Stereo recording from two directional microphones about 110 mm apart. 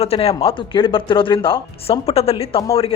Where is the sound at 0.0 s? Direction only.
65° left (ahead or behind).